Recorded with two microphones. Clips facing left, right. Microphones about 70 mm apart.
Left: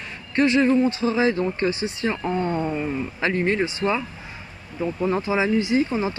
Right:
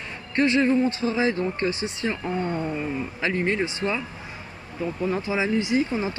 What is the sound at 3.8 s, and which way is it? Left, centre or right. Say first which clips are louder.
Speech: left 5 dB; centre.